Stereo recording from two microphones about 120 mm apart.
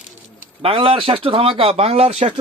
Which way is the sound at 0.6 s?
50° right (ahead or behind).